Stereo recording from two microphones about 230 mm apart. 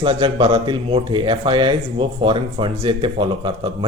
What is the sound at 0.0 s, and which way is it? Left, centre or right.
Speech, right.